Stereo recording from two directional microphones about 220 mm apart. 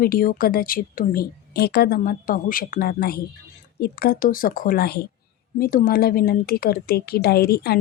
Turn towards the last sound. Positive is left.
turn(degrees=45)  # may be behind; listen again after turning